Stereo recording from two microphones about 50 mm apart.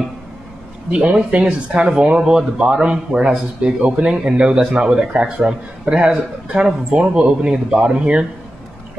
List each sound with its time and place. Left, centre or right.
0.9 s a man's voice: right